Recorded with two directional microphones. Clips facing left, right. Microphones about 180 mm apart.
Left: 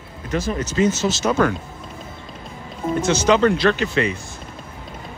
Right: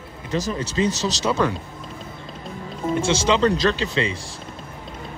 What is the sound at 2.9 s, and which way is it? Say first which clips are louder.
Speech: left 1 dB; 30° right (ahead or behind).